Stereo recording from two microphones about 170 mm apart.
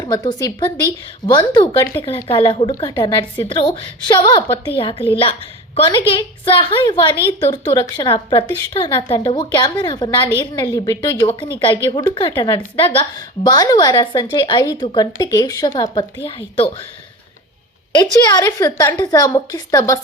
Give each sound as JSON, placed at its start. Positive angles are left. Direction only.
{"t": 0.0, "sound": "a woman's voice", "side_deg": 20}
{"t": 17.9, "sound": "a woman's voice", "side_deg": 25}